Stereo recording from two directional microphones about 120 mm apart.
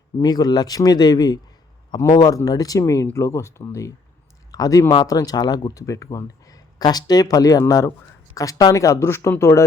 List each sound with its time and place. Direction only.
0.2 s speech: 35° left (ahead or behind)